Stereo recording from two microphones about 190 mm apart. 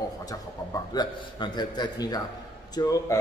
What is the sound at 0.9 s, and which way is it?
A man's voice, 20° left (ahead or behind).